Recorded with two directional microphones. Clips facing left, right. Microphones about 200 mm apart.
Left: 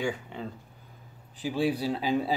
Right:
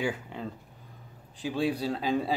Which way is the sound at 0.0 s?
Centre (ahead or behind).